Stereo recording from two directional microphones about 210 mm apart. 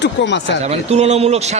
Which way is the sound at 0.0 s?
55° left (ahead or behind).